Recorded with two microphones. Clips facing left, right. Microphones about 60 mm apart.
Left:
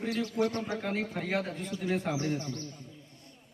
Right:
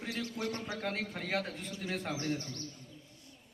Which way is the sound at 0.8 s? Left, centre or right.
Centre.